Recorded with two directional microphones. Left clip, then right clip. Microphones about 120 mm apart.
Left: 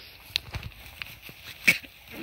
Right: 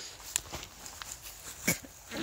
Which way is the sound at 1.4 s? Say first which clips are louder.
Left 12 dB; 15° right (ahead or behind).